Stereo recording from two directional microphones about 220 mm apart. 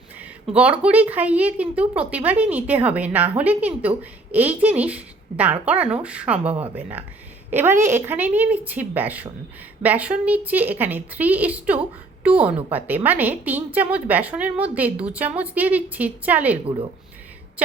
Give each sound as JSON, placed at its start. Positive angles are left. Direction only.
{"t": 0.2, "sound": "a woman's voice", "side_deg": -5}